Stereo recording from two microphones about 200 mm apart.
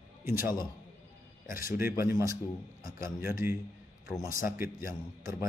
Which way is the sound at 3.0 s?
45° left (ahead or behind).